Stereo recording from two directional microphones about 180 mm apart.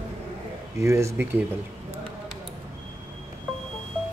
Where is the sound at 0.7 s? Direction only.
15° right (ahead or behind).